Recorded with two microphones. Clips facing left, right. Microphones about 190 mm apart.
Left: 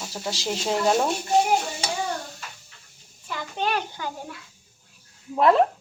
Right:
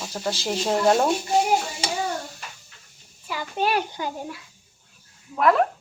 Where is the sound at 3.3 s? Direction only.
10° right (ahead or behind).